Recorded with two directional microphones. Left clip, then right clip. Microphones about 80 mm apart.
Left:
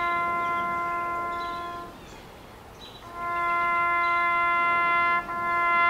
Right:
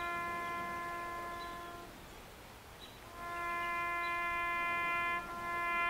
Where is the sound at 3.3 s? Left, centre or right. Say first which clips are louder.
Left 13 dB; centre.